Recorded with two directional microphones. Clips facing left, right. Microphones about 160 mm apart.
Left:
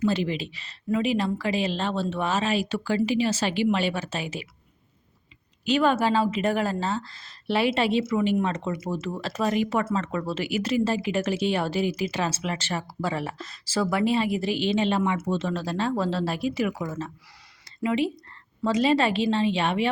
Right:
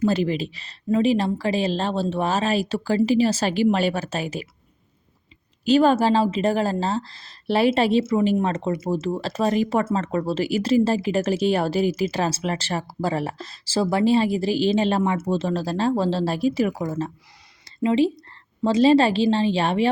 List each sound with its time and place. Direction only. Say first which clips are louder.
0.0 s speech: right 4 dB; 40° right (ahead or behind)
5.6 s speech: right 5 dB; 35° right (ahead or behind)
17.7 s a sound: right 5 dB; 30° right (ahead or behind)
18.6 s speech: right 6 dB; 30° right (ahead or behind)